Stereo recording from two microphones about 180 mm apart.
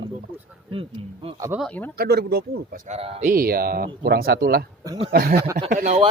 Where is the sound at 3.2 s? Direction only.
55° right (ahead or behind).